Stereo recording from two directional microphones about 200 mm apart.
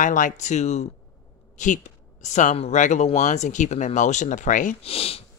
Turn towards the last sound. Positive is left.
turn(degrees=30)  # may be behind; listen again after turning